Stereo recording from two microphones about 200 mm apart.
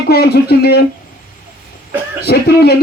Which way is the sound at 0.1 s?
50° left (ahead or behind).